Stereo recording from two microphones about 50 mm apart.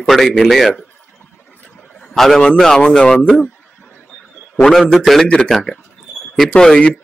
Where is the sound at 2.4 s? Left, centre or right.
Centre.